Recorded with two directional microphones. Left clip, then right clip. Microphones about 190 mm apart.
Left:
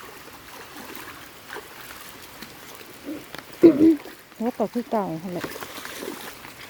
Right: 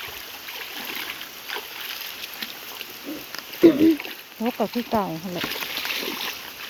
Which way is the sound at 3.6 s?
20° left (ahead or behind).